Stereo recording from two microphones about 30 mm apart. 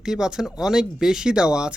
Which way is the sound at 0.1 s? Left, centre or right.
Centre.